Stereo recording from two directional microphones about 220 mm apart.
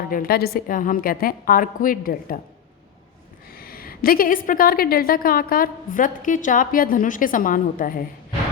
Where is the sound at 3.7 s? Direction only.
40° left (ahead or behind).